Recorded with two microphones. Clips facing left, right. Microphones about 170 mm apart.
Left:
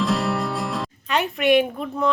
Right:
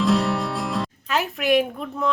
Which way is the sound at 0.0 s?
Centre (ahead or behind).